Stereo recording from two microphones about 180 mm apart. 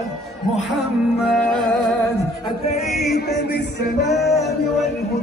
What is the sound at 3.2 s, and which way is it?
Speech, 65° left (ahead or behind).